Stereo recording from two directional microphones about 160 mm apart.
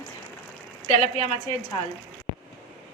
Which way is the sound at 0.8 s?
40° left (ahead or behind).